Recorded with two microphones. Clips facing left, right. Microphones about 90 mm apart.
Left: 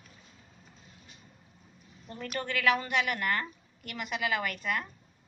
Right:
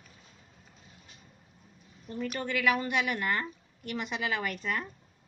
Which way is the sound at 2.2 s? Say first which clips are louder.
Even; 15° right (ahead or behind).